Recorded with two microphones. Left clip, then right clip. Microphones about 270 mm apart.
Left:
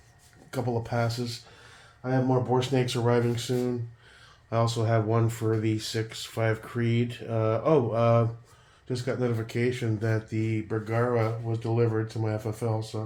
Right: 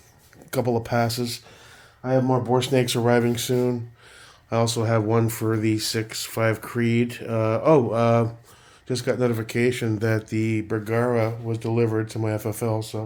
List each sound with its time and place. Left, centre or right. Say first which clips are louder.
0.5 s speech: right 7 dB; right